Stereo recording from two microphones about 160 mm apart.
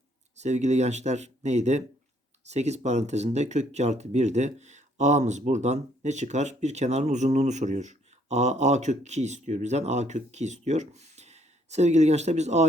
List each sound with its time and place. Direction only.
0.3 s speech: 45° right (ahead or behind)